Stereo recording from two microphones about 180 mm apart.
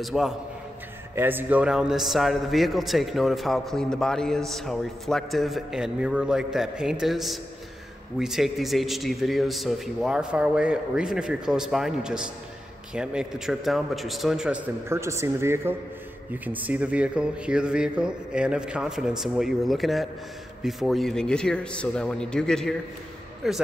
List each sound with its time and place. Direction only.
0.0 s a man's voice: centre (ahead or behind)
1.1 s a man's voice: 10° right (ahead or behind)
14.9 s a man's voice: 15° right (ahead or behind); by 23.6 s centre (ahead or behind)